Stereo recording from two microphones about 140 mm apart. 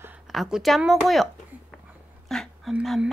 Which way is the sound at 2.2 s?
Centre (ahead or behind).